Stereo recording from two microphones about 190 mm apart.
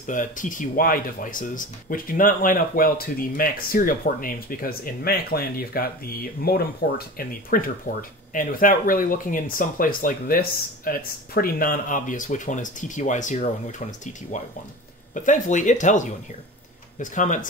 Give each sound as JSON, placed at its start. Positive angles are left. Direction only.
{"t": 0.0, "sound": "speech", "side_deg": 40}